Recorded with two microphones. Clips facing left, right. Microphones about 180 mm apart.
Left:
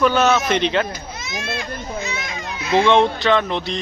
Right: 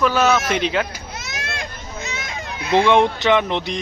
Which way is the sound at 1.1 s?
75° right (ahead or behind).